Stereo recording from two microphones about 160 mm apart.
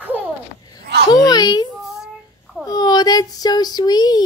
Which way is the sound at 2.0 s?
Centre (ahead or behind).